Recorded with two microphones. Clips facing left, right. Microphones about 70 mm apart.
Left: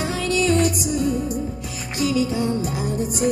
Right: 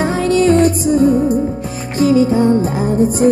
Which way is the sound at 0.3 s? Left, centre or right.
Right.